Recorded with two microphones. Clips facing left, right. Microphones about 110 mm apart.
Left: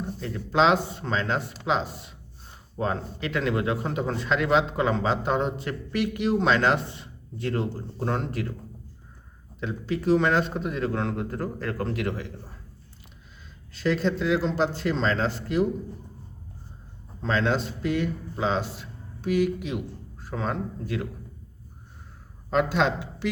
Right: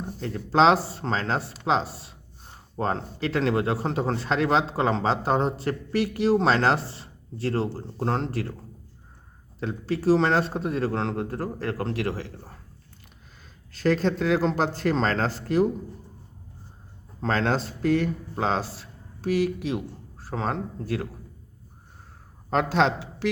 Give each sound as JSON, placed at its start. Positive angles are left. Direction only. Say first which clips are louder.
{"t": 0.2, "sound": "speech", "louder": "right 2 dB", "side_deg": -45}
{"t": 9.6, "sound": "speech", "louder": "right 1 dB", "side_deg": -40}
{"t": 13.7, "sound": "a man's voice", "louder": "right 2 dB", "side_deg": -45}
{"t": 17.2, "sound": "a man's voice", "louder": "even", "side_deg": -45}
{"t": 22.4, "sound": "speech", "louder": "right 1 dB", "side_deg": -40}